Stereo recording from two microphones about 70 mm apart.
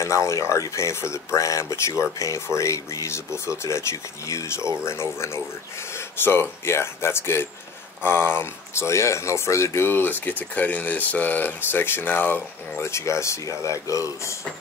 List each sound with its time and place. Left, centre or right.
0.0 s speech: left
12.8 s speech: left